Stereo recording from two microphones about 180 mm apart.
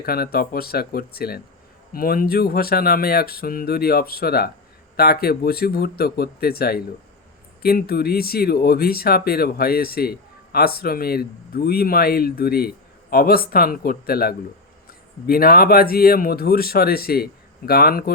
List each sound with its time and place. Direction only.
0.0 s speech: 55° left (ahead or behind)